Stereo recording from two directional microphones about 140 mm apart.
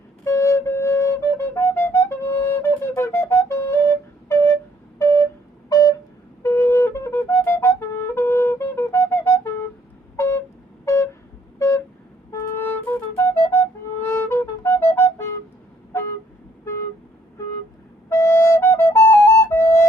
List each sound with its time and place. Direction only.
0.3 s flute: 20° left (ahead or behind)
4.9 s a sound: 20° left (ahead or behind)
6.4 s music: 20° left (ahead or behind)
10.2 s vehicle: 20° left (ahead or behind)
10.8 s a sound: 20° left (ahead or behind)
12.5 s music: 15° left (ahead or behind)
15.9 s vehicle: 20° left (ahead or behind)
18.1 s flute: 20° left (ahead or behind)